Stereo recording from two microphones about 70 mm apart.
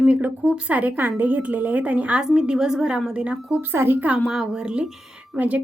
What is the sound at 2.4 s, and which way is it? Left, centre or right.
A woman's voice, centre.